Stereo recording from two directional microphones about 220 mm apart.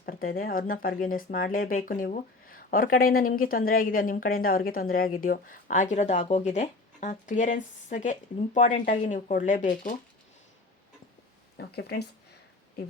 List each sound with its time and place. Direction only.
0.0 s speech: 40° left (ahead or behind)
11.5 s speech: 45° left (ahead or behind)